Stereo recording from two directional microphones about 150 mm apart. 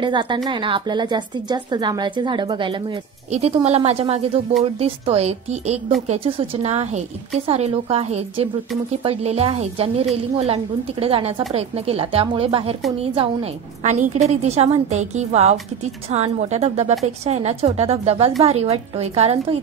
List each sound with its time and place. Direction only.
0.0 s a woman's voice: 30° right (ahead or behind)
3.3 s a woman's voice: 45° right (ahead or behind)